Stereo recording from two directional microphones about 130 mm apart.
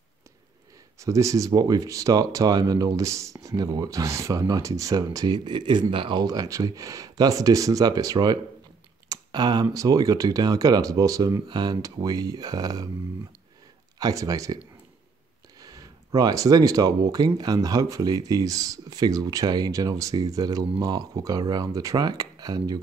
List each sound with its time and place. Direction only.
0.9 s speech: 25° right (ahead or behind)
13.9 s speech: 30° right (ahead or behind)
15.6 s speech: 30° right (ahead or behind)